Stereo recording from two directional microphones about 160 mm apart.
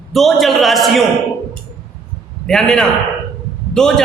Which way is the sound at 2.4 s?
5° left (ahead or behind).